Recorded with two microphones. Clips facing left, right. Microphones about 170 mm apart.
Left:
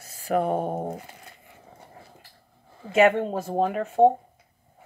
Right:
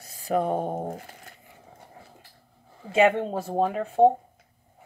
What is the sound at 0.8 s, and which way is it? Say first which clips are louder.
Speech: left 1 dB; 50° right (ahead or behind).